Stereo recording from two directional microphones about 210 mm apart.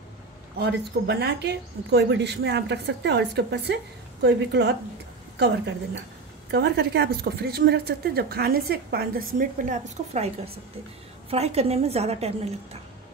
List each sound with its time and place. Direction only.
0.6 s a woman's voice: 55° right (ahead or behind); by 12.5 s 30° right (ahead or behind)